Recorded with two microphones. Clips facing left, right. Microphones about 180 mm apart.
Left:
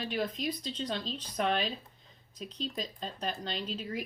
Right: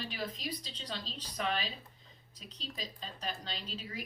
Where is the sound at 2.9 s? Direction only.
50° left (ahead or behind).